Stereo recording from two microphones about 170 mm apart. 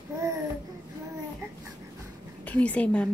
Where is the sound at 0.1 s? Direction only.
15° right (ahead or behind).